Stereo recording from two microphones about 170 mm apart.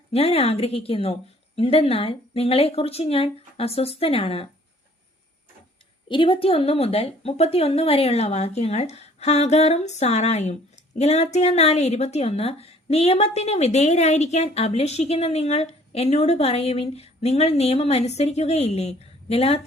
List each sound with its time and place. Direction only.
0.1 s a woman's voice: 35° left (ahead or behind)
6.1 s a woman's voice: 30° left (ahead or behind)